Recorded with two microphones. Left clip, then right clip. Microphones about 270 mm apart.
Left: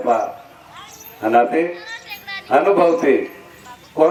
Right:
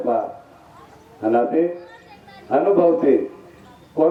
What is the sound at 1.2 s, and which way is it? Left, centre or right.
Speech, left.